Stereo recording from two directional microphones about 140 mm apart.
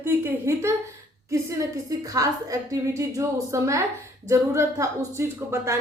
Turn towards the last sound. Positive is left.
turn(degrees=-20)  # may be behind; listen again after turning